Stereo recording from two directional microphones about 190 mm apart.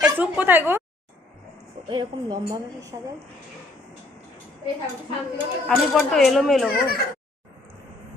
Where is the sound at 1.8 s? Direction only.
25° right (ahead or behind).